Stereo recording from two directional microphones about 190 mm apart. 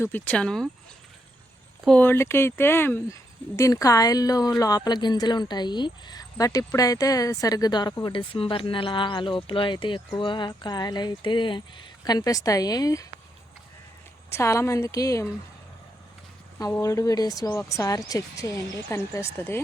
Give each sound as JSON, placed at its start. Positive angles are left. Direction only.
{"t": 0.0, "sound": "speech", "side_deg": 10}
{"t": 1.8, "sound": "speech", "side_deg": 5}
{"t": 14.3, "sound": "speech", "side_deg": 15}
{"t": 16.6, "sound": "speech", "side_deg": 20}